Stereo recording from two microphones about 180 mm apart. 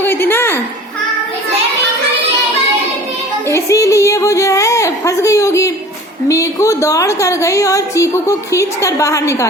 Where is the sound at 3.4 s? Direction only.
15° left (ahead or behind).